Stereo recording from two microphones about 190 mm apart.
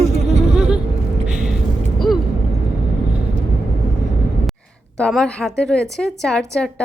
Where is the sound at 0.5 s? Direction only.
5° right (ahead or behind).